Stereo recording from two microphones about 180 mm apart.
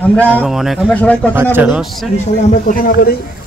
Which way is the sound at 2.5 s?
50° left (ahead or behind).